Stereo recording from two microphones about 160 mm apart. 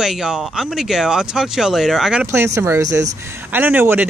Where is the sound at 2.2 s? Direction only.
15° right (ahead or behind).